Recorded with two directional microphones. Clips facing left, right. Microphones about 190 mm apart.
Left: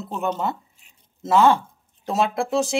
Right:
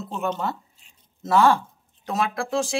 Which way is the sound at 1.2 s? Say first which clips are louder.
Left 2 dB; 20° left (ahead or behind).